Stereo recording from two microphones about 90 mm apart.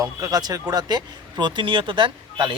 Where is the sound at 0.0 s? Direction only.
40° right (ahead or behind).